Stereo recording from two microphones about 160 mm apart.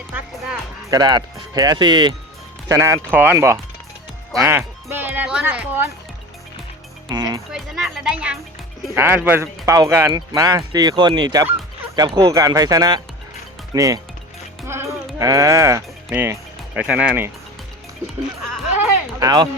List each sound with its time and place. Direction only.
0.1 s speech: 5° right (ahead or behind)
0.9 s speech: 25° right (ahead or behind)
7.1 s speech: 25° right (ahead or behind)
7.5 s speech: centre (ahead or behind); by 14.0 s 20° right (ahead or behind)
15.2 s speech: 20° right (ahead or behind)
18.8 s a sound: 25° right (ahead or behind)